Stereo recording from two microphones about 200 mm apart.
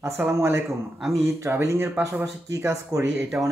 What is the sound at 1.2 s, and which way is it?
Speech, 15° right (ahead or behind).